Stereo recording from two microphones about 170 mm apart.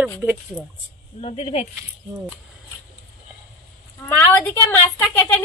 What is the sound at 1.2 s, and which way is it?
Speech, 35° left (ahead or behind).